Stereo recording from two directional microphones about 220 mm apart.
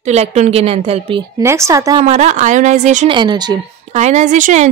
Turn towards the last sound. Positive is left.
turn(degrees=-35)  # may be behind; listen again after turning